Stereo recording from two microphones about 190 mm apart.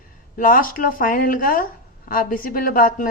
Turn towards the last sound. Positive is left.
turn(degrees=45)  # may be behind; listen again after turning